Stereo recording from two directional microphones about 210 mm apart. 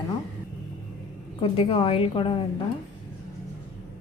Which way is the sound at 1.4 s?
25° left (ahead or behind).